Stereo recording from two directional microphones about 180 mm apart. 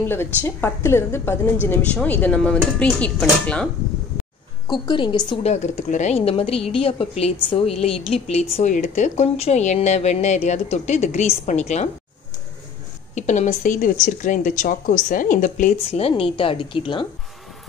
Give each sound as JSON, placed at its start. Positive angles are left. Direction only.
{"t": 0.1, "sound": "a woman's voice", "side_deg": 10}
{"t": 4.6, "sound": "a woman's voice", "side_deg": 25}
{"t": 5.4, "sound": "speech", "side_deg": 40}
{"t": 13.1, "sound": "speech", "side_deg": 40}